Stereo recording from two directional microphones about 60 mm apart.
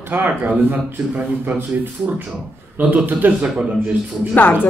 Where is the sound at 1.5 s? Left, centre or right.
Right.